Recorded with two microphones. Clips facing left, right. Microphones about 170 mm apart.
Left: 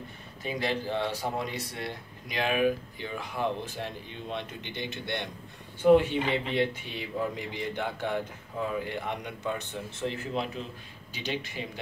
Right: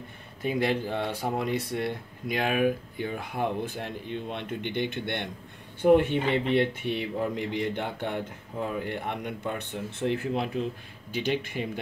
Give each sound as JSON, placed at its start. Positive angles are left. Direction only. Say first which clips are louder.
{"t": 0.4, "sound": "speech", "louder": "right 4 dB", "side_deg": -55}